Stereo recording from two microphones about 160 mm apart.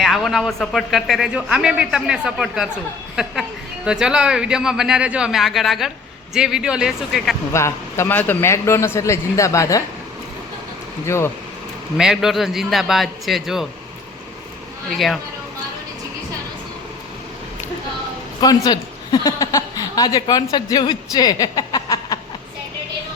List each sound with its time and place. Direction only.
0.0 s a man's voice: centre (ahead or behind)
7.5 s a man's voice: 15° left (ahead or behind)
11.0 s a man's voice: 15° left (ahead or behind)
11.9 s a man's voice: 5° right (ahead or behind)
14.8 s a man's voice: centre (ahead or behind)
18.3 s a woman's voice: 25° left (ahead or behind)